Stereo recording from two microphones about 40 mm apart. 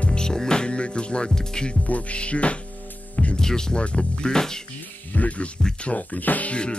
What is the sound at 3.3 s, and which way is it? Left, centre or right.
Speech, centre.